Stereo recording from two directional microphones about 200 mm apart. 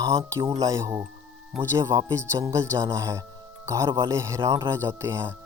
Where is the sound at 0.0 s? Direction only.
15° right (ahead or behind).